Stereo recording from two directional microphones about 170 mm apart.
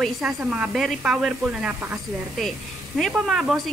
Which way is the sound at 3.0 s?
5° right (ahead or behind).